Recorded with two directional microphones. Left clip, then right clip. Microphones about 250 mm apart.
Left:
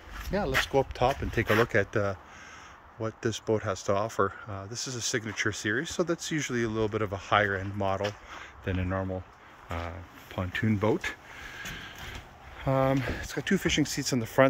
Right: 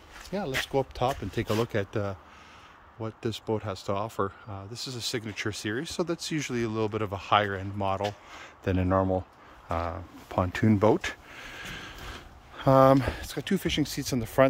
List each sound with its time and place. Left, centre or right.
0.5 s speech: centre
8.4 s speech: right
9.7 s a sound: centre
12.5 s speech: right; by 14.5 s centre